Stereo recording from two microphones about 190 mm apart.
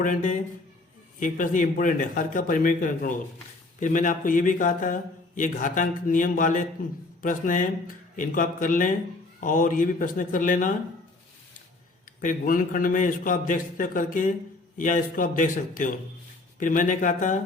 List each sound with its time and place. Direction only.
0.0 s a man's voice: 40° left (ahead or behind)
12.2 s a man's voice: 45° left (ahead or behind)